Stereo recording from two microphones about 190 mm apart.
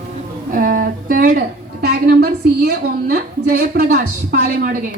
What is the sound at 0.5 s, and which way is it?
A woman's voice, 45° right (ahead or behind).